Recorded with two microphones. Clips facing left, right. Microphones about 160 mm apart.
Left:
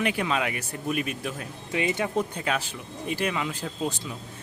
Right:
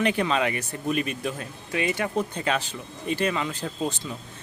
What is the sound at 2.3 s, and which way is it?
Speech, 5° left (ahead or behind).